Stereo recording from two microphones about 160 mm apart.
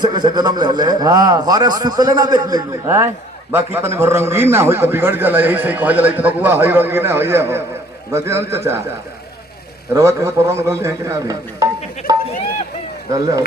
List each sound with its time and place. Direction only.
0.0 s a man's voice: 25° right (ahead or behind)
9.9 s a man's voice: 20° right (ahead or behind)
13.1 s a man's voice: 20° right (ahead or behind)